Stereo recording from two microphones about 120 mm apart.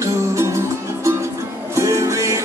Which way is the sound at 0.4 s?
25° right (ahead or behind).